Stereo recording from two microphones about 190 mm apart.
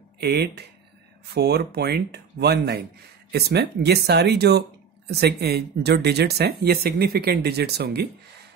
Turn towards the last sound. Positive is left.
turn(degrees=-60)  # may be behind; listen again after turning